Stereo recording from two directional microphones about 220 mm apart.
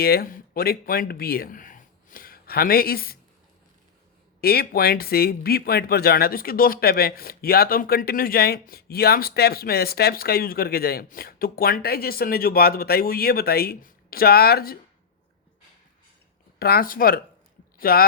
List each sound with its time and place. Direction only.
0.0 s speech: 45° left (ahead or behind)
4.4 s speech: 45° left (ahead or behind)
16.6 s speech: 45° left (ahead or behind)